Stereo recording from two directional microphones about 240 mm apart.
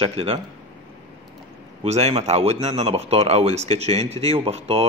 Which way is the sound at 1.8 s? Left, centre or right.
Right.